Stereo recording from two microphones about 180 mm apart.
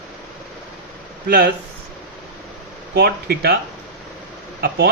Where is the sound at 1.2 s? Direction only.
65° right (ahead or behind).